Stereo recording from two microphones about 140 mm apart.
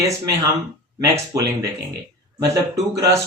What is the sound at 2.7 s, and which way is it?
Speech, 25° right (ahead or behind).